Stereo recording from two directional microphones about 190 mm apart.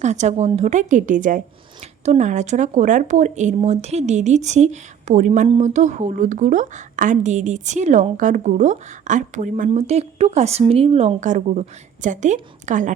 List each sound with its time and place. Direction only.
0.0 s speech: 35° right (ahead or behind)